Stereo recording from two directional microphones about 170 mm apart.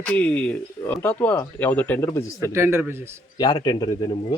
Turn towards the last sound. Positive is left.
turn(degrees=25)  # may be behind; listen again after turning